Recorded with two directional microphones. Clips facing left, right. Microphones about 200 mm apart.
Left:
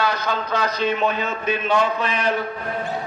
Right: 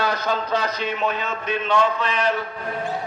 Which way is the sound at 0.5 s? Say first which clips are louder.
Left 2 dB; 35° right (ahead or behind).